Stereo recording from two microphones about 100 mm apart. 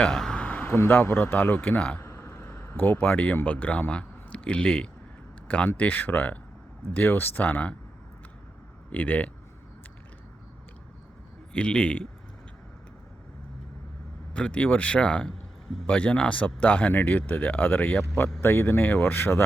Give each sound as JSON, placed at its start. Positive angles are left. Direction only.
{"t": 0.0, "sound": "speech", "side_deg": 5}
{"t": 8.9, "sound": "speech", "side_deg": 15}
{"t": 11.5, "sound": "speech", "side_deg": 10}
{"t": 14.3, "sound": "speech", "side_deg": 10}